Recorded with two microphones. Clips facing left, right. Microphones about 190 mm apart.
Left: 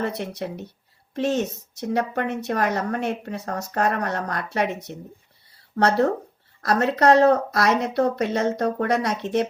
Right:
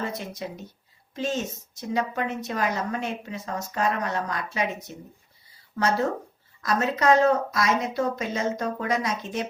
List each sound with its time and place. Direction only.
0.0 s a woman's voice: 65° left (ahead or behind)
5.7 s a woman's voice: 65° left (ahead or behind)